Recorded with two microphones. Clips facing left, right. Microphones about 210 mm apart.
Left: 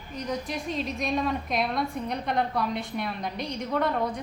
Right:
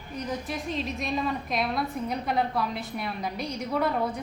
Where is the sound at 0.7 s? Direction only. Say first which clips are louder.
Left 2 dB; centre (ahead or behind).